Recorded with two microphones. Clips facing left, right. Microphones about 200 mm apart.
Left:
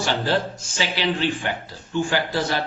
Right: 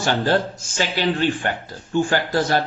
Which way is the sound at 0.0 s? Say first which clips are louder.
Right 3 dB; 50° right (ahead or behind).